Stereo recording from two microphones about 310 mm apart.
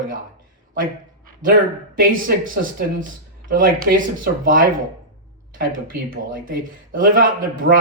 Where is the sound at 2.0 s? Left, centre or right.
Right.